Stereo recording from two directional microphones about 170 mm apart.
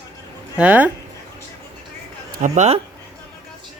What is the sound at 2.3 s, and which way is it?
Speech, 50° right (ahead or behind).